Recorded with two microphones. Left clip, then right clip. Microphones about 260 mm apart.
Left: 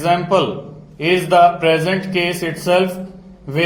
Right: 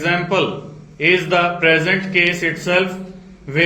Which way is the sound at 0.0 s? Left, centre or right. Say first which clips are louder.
Left 2 dB; left.